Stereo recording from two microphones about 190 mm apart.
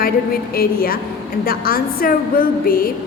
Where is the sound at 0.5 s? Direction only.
50° left (ahead or behind).